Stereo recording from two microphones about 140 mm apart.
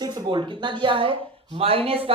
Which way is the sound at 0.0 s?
30° right (ahead or behind).